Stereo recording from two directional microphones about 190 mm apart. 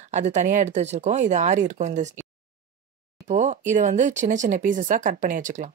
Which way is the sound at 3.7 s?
40° right (ahead or behind).